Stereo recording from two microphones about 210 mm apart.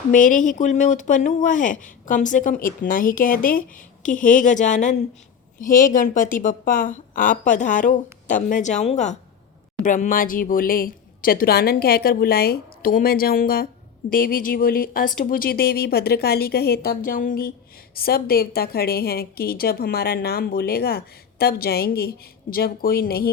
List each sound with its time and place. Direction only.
0.1 s a woman's voice: 40° left (ahead or behind)